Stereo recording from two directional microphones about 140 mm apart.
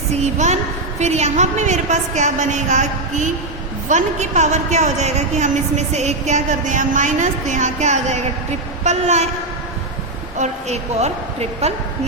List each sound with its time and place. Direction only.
0.1 s a woman's voice: 55° right (ahead or behind)
10.3 s a woman's voice: 55° right (ahead or behind)